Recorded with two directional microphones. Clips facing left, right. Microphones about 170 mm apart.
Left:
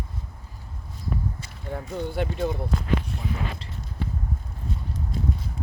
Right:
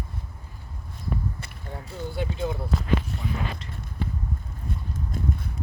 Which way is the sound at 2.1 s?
55° left (ahead or behind).